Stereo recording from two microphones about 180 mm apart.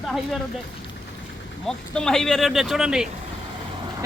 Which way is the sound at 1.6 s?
5° left (ahead or behind).